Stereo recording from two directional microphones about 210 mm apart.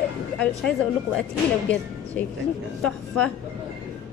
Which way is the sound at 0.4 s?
5° left (ahead or behind).